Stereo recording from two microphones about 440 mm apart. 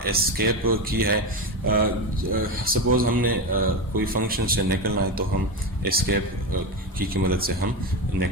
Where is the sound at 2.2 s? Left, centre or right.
Centre.